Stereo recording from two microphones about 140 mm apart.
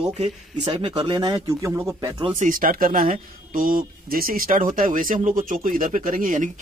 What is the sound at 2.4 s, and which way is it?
Speech, 80° right.